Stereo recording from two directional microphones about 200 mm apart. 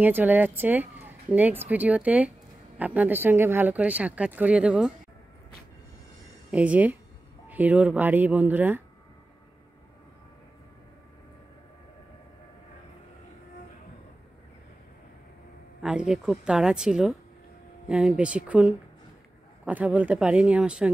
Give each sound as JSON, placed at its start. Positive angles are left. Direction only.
{"t": 0.0, "sound": "speech", "side_deg": -10}
{"t": 6.5, "sound": "speech", "side_deg": -5}
{"t": 15.8, "sound": "a woman's voice", "side_deg": -5}